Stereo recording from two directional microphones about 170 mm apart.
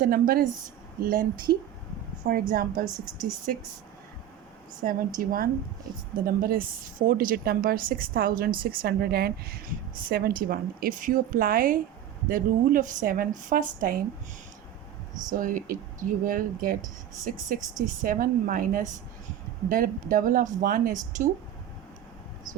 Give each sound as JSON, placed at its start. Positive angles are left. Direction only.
{"t": 0.0, "sound": "a woman's voice", "side_deg": -55}
{"t": 2.5, "sound": "a woman's voice", "side_deg": -55}
{"t": 4.8, "sound": "a woman's voice", "side_deg": -55}
{"t": 15.2, "sound": "speech", "side_deg": -50}